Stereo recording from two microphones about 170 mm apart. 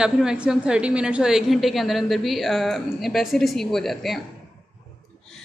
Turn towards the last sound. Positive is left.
turn(degrees=0)  # may be behind; listen again after turning